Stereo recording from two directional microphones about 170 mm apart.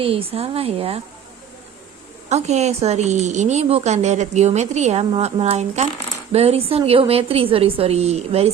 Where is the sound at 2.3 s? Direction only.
40° right (ahead or behind).